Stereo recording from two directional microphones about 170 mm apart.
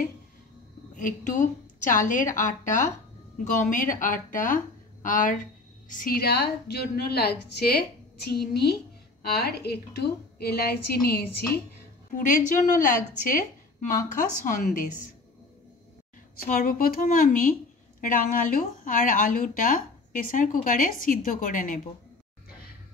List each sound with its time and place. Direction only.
0.9 s a woman's voice: 50° left (ahead or behind); by 11.4 s 65° left (ahead or behind)
12.1 s speech: 50° left (ahead or behind)
16.4 s a woman's voice: 55° left (ahead or behind)